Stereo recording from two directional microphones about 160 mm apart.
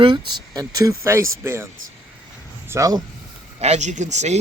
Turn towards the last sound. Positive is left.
turn(degrees=-45)  # may be behind; listen again after turning